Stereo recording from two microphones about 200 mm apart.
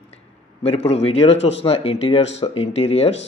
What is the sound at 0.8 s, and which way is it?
Speech, 30° left (ahead or behind).